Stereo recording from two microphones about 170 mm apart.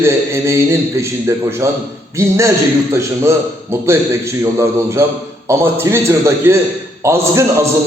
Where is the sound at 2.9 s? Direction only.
15° right (ahead or behind).